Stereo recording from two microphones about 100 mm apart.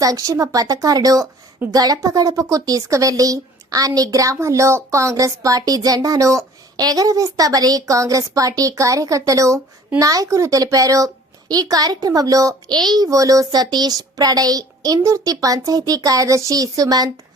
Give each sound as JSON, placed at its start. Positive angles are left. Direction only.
{"t": 0.0, "sound": "a woman's voice", "side_deg": -35}